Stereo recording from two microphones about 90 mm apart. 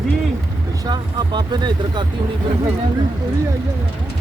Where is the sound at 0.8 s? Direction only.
55° right (ahead or behind).